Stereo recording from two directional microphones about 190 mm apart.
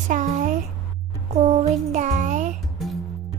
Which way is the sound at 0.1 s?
45° right (ahead or behind).